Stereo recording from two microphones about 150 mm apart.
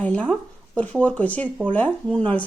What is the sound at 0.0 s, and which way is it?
Speech, 5° left (ahead or behind).